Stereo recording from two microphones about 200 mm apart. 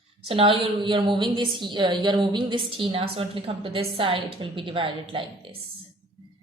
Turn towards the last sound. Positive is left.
turn(degrees=-25)  # may be behind; listen again after turning